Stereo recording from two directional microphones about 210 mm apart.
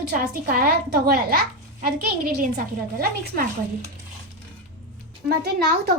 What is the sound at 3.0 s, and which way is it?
Speech, 45° right (ahead or behind).